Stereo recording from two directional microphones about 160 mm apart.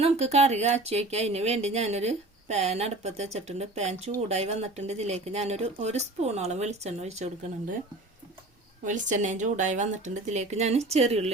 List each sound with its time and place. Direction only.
0.0 s speech: 40° right (ahead or behind)
8.8 s speech: 50° right (ahead or behind)